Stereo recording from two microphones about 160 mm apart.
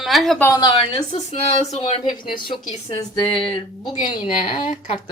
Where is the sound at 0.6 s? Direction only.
35° left (ahead or behind).